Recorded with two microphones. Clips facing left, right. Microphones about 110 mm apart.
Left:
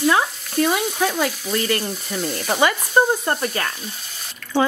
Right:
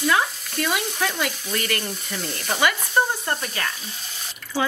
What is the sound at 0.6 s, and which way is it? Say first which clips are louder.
Frying: left 4 dB; 30° left (ahead or behind).